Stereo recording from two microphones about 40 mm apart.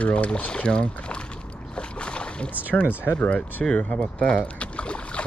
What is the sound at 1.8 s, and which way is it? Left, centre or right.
Boat, left.